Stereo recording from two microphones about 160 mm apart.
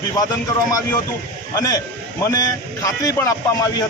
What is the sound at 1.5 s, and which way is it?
A man's voice, 20° left (ahead or behind).